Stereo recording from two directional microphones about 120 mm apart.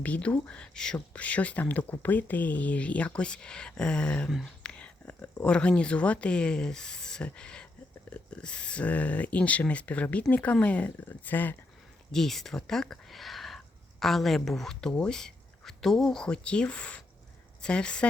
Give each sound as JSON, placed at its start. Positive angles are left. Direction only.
{"t": 0.0, "sound": "speech", "side_deg": 10}
{"t": 12.1, "sound": "speech", "side_deg": 0}